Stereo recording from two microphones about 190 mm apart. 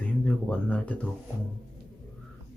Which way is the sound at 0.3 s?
5° left (ahead or behind).